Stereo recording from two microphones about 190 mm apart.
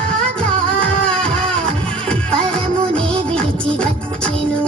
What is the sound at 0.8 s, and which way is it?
Music, 5° left (ahead or behind).